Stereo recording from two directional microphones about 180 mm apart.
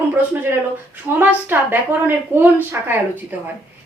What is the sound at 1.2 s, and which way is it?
A woman's voice, 10° right (ahead or behind).